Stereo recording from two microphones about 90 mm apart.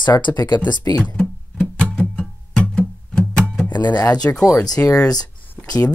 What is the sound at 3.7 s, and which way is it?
Speech, 50° left (ahead or behind).